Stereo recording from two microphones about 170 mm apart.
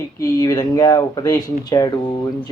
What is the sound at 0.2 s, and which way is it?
Speech, 20° left (ahead or behind).